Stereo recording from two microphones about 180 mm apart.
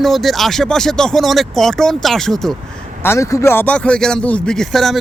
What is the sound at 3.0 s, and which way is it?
Speech, 15° left (ahead or behind).